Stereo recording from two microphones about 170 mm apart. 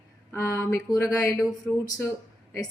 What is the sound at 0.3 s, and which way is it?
A woman's voice, 20° left (ahead or behind).